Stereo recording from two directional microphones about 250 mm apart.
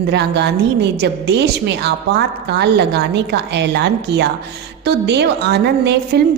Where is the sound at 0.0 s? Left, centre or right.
Right.